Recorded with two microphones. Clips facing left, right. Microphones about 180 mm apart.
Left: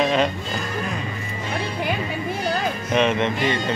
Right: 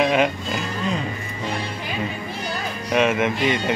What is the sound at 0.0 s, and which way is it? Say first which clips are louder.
Music: right 1 dB; 10° right (ahead or behind).